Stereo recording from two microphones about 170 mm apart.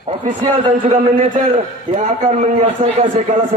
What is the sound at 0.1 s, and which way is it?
A man's voice, 40° right (ahead or behind).